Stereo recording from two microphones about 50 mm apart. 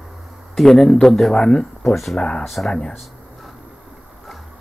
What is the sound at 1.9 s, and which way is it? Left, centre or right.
Speech, centre.